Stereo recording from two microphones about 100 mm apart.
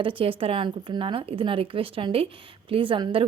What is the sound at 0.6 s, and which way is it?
Speech, 55° right (ahead or behind).